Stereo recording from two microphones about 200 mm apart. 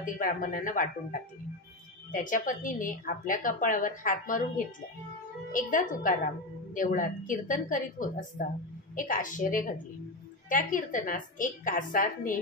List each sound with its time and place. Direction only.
0.0 s a woman's voice: 40° left (ahead or behind)
2.1 s a woman's voice: 40° left (ahead or behind)
5.5 s a woman's voice: 40° left (ahead or behind)